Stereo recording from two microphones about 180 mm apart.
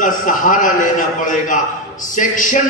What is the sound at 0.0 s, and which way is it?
A man's voice, 45° left (ahead or behind).